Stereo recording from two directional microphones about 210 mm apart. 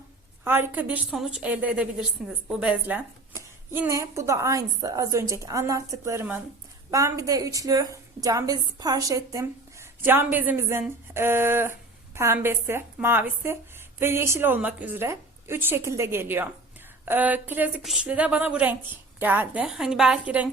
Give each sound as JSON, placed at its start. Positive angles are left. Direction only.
{"t": 0.4, "sound": "a woman's voice", "side_deg": -10}